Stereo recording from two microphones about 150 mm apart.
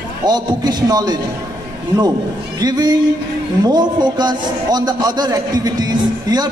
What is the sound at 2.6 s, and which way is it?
A man's voice, 25° right (ahead or behind).